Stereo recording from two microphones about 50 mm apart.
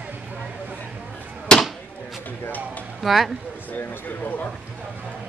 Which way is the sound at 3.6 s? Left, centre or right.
Left.